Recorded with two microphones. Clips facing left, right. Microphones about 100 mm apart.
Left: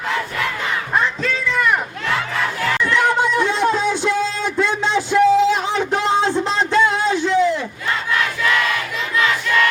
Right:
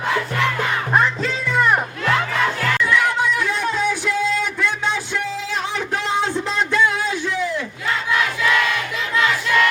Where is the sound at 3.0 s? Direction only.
25° left (ahead or behind).